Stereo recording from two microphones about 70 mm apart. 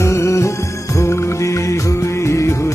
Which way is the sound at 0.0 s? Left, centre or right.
Left.